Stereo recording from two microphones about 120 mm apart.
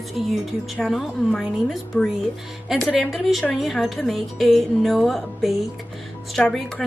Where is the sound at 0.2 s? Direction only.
5° right (ahead or behind).